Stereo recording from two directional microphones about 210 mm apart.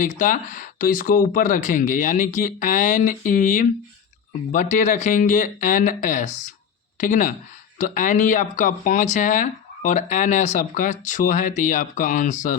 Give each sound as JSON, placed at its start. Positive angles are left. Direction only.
{"t": 0.0, "sound": "speech", "side_deg": 40}